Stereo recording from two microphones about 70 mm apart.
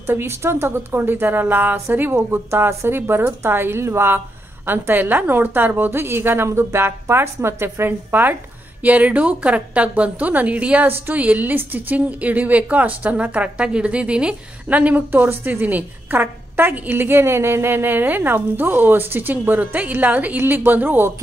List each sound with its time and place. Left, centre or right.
0.0 s a woman's voice: right